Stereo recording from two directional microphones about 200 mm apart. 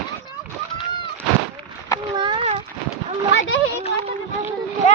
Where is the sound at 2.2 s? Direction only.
25° right (ahead or behind).